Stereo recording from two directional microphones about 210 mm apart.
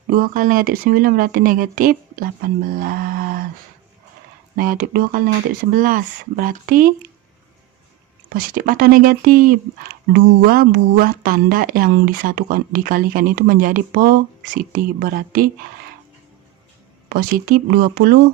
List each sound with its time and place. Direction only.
0.1 s speech: 40° right (ahead or behind)
4.5 s speech: 40° right (ahead or behind)
8.3 s speech: 40° right (ahead or behind)
17.1 s speech: 45° right (ahead or behind)